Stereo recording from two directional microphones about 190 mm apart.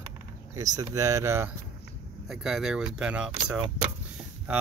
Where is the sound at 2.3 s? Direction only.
Centre (ahead or behind).